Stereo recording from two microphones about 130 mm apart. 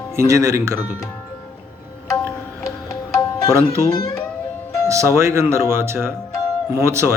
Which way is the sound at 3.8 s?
25° left (ahead or behind).